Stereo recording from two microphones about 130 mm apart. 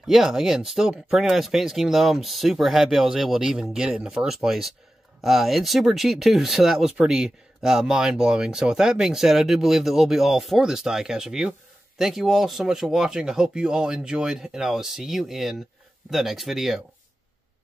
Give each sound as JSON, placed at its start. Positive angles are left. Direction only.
{"t": 0.0, "sound": "speech", "side_deg": -5}